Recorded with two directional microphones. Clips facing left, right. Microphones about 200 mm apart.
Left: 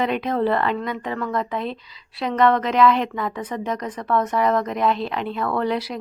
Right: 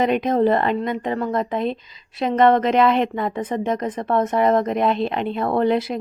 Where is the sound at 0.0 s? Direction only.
20° right (ahead or behind).